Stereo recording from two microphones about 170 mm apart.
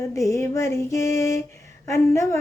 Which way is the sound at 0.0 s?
15° left (ahead or behind).